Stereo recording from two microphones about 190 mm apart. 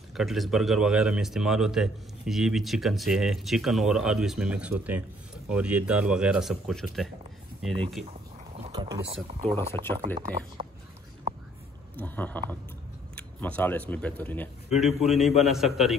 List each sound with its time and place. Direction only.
0.1 s a man's voice: centre (ahead or behind)
8.7 s speech: 20° right (ahead or behind)
9.0 s speech: 30° right (ahead or behind)
9.4 s speech: 15° left (ahead or behind)
10.1 s speech: 25° right (ahead or behind)
12.0 s speech: 10° left (ahead or behind)
14.7 s a man's voice: centre (ahead or behind)